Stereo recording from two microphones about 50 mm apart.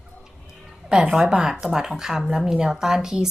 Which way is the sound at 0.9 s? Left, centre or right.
Centre.